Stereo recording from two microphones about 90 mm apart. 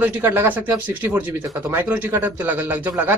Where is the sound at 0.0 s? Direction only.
25° right (ahead or behind).